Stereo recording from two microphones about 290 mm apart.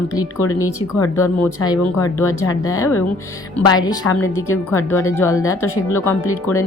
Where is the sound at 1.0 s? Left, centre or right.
Left.